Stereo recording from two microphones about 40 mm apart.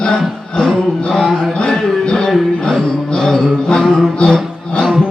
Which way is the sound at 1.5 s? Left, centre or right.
Left.